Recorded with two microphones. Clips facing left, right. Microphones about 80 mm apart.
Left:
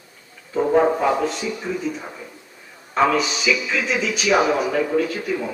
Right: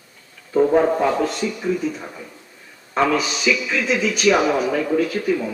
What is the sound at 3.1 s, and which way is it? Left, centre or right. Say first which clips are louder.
A man's voice: right 1 dB; centre.